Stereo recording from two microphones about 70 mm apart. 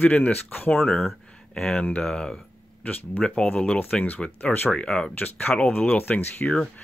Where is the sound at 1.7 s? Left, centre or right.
Centre.